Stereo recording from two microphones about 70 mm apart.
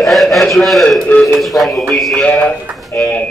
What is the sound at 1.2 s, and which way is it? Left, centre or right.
Speech, centre.